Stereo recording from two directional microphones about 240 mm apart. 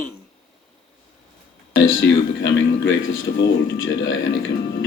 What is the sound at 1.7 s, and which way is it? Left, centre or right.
Speech, left.